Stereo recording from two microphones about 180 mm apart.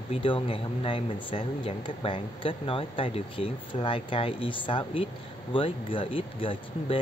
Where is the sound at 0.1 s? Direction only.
30° left (ahead or behind).